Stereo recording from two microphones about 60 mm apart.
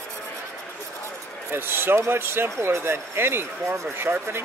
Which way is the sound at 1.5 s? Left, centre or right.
Right.